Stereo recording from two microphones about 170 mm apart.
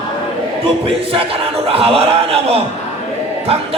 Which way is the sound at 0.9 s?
35° right (ahead or behind).